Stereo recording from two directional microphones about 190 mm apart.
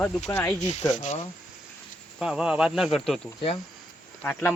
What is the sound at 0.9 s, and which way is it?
Speech, 40° left (ahead or behind).